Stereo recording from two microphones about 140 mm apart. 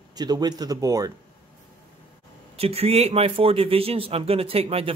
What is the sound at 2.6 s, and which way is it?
Speech, 45° right (ahead or behind).